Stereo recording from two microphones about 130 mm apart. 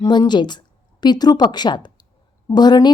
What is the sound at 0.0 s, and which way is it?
A woman's voice, 35° left (ahead or behind).